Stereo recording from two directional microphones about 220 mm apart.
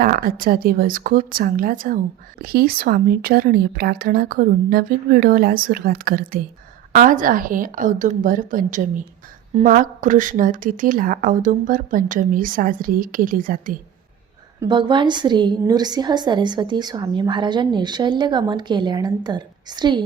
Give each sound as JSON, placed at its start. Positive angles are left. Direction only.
{"t": 0.0, "sound": "a woman's voice", "side_deg": -40}
{"t": 14.7, "sound": "a woman's voice", "side_deg": -20}